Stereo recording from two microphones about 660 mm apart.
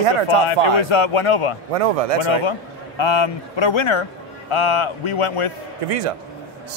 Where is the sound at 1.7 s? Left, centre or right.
Right.